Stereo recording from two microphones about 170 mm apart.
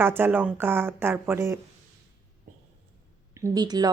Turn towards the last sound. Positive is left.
turn(degrees=-25)  # may be behind; listen again after turning